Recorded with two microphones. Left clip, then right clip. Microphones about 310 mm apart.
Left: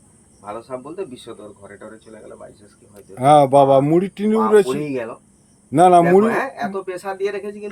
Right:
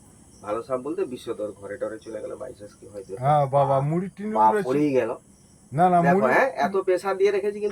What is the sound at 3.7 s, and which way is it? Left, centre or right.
Speech, left.